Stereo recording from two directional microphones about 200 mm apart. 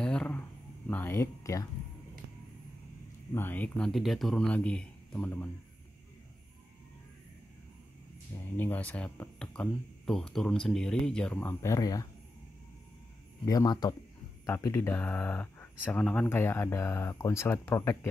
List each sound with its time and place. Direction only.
0.0 s a sound: 5° left (ahead or behind)
3.3 s speech: 10° left (ahead or behind)
8.5 s speech: 10° left (ahead or behind)
13.5 s speech: 20° left (ahead or behind)